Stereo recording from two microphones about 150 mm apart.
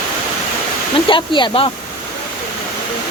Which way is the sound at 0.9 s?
35° left (ahead or behind).